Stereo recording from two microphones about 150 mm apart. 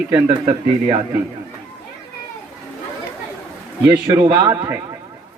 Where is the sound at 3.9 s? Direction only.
20° right (ahead or behind).